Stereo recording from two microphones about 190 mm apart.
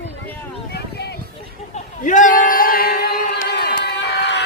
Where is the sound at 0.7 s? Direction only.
60° left (ahead or behind).